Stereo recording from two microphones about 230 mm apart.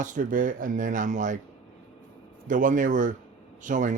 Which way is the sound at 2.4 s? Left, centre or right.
Right.